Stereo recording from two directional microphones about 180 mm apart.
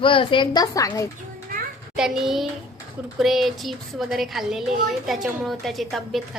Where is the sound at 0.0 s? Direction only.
30° left (ahead or behind).